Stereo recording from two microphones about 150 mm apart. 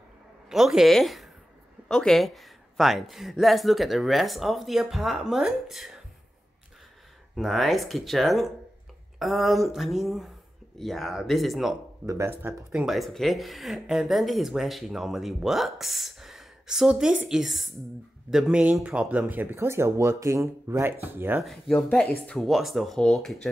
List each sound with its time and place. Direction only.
0.5 s a woman's voice: centre (ahead or behind)
7.3 s speech: centre (ahead or behind)
12.1 s speech: 15° right (ahead or behind)
12.7 s speech: centre (ahead or behind)
21.9 s speech: 5° left (ahead or behind)